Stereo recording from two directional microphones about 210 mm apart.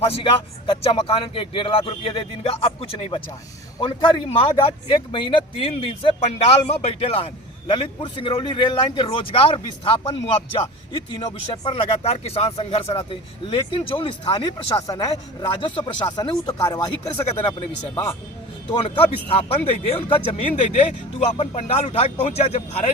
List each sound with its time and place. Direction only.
0.0 s speech: 25° left (ahead or behind)
18.7 s speech: 25° left (ahead or behind)